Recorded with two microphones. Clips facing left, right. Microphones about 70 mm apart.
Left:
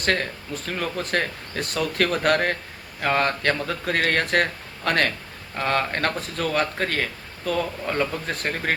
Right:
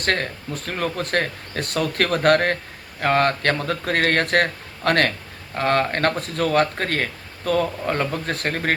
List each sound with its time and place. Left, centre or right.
0.0 s speech: right